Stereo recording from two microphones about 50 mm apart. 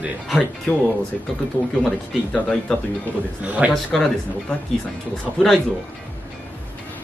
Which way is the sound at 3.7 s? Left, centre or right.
Centre.